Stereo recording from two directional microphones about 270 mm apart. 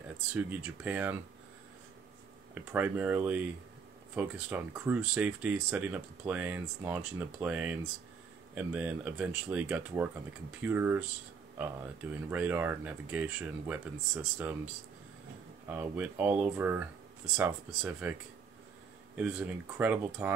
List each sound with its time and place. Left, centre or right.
0.3 s speech: centre
2.5 s speech: centre
15.7 s speech: centre
19.1 s speech: centre